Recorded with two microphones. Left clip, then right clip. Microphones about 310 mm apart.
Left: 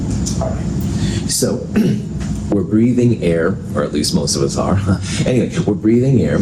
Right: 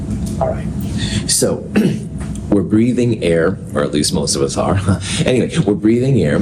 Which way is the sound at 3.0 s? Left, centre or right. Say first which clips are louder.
Right 1 dB; right.